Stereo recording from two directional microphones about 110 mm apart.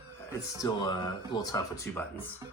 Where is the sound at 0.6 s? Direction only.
40° left (ahead or behind).